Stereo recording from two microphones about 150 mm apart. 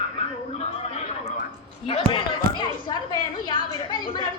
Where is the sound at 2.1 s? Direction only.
30° left (ahead or behind).